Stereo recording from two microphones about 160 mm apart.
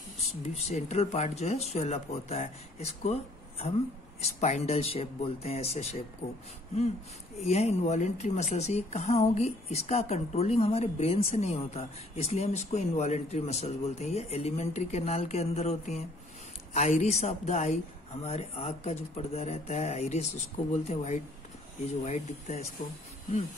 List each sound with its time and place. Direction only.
0.3 s a woman's voice: 45° left (ahead or behind)
7.4 s a woman's voice: 45° left (ahead or behind)